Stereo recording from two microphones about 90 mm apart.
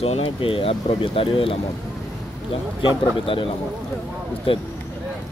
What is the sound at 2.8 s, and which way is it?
Speech, 65° left (ahead or behind).